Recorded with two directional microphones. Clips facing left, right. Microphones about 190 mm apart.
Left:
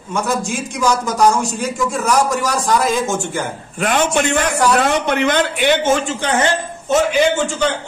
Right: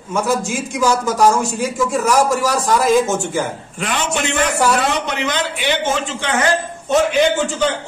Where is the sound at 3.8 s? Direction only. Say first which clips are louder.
Left 5 dB; 55° left (ahead or behind).